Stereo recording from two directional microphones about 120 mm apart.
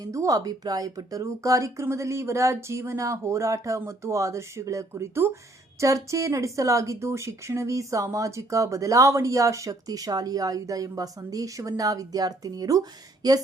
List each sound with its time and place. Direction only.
0.0 s speech: 30° right (ahead or behind)